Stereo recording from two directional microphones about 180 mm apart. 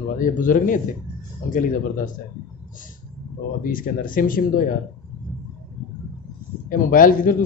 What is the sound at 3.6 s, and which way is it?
Speech, 50° left (ahead or behind).